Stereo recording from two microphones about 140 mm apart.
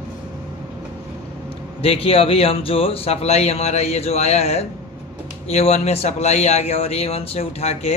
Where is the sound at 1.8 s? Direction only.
40° left (ahead or behind).